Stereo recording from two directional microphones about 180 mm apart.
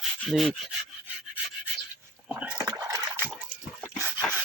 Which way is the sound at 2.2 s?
10° right (ahead or behind).